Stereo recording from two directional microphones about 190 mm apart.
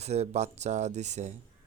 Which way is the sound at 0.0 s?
35° right (ahead or behind).